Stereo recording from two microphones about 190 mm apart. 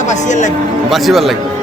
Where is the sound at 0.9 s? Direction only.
Centre (ahead or behind).